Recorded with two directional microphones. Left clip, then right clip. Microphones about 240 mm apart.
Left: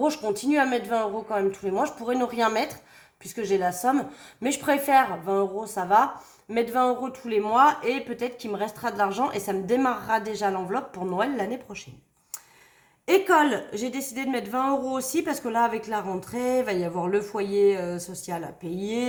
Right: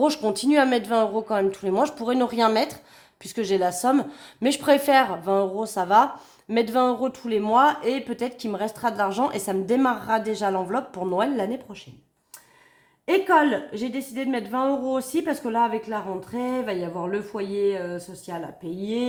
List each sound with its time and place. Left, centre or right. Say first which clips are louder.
0.0 s a woman's voice: right 3 dB; right
13.1 s a woman's voice: right 1 dB; right